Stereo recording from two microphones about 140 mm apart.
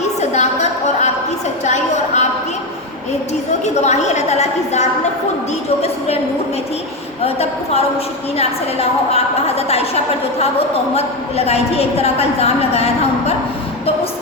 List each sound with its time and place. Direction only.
0.2 s a sound: 55° left (ahead or behind)
3.6 s a woman's voice: 55° left (ahead or behind)
7.3 s a woman's voice: 45° left (ahead or behind)